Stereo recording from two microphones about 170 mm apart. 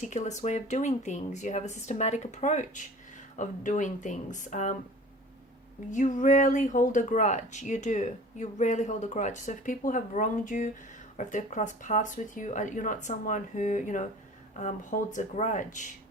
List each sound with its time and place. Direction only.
0.0 s speech: 45° left (ahead or behind)
5.9 s speech: 50° left (ahead or behind)